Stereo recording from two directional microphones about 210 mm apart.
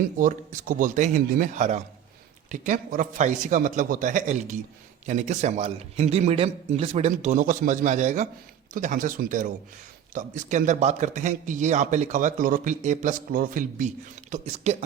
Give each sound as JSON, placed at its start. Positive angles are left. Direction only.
{"t": 0.2, "sound": "a man's voice", "side_deg": -40}